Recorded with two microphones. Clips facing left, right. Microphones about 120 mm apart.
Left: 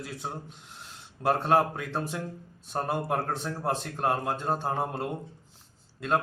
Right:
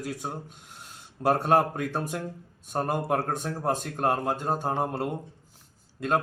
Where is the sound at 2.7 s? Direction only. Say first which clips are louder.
Right 2 dB; 10° right (ahead or behind).